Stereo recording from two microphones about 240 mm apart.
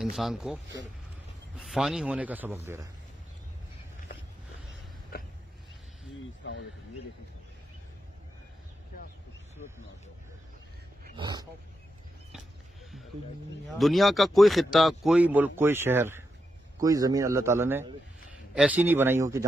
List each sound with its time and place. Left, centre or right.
0.0 s speech: centre
1.6 s speech: centre
5.1 s a sound: left
6.4 s speech: left
11.1 s a man's voice: centre
13.7 s a man's voice: centre